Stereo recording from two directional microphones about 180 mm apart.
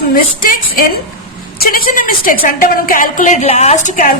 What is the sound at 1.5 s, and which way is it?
A woman's voice, 55° left (ahead or behind).